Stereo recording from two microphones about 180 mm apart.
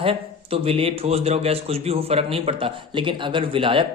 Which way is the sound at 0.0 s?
30° right (ahead or behind).